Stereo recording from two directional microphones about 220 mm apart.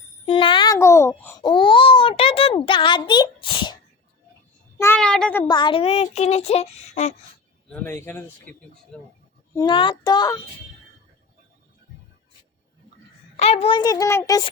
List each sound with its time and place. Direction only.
0.3 s speech: 25° left (ahead or behind)
4.8 s a sound: 5° left (ahead or behind)
5.5 s a child's voice: 20° left (ahead or behind)
7.7 s speech: 10° left (ahead or behind)
9.6 s a child's voice: 20° left (ahead or behind)
13.3 s a child's voice: 30° left (ahead or behind)